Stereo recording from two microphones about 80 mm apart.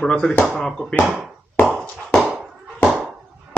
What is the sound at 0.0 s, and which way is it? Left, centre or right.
Speech, centre.